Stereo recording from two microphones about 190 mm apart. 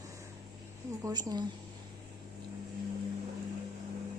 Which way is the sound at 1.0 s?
20° right (ahead or behind).